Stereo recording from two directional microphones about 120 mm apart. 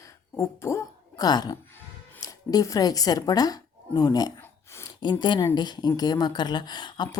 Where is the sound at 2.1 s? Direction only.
30° left (ahead or behind).